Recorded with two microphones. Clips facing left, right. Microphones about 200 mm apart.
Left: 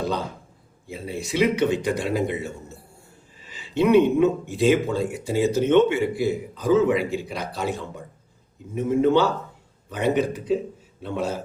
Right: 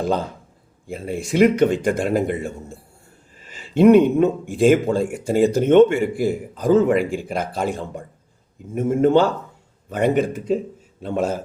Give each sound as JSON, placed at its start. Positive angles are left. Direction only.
{"t": 0.9, "sound": "speech", "side_deg": -50}